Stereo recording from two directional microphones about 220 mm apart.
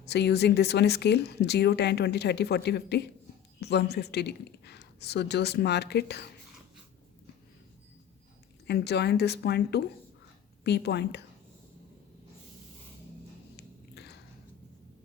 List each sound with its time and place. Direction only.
0.0 s speech: 50° left (ahead or behind)
8.6 s speech: 50° left (ahead or behind)
13.6 s a sound: 50° left (ahead or behind)